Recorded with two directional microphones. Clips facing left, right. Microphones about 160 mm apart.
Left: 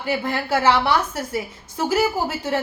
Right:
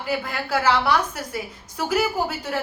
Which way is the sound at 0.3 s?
25° left (ahead or behind).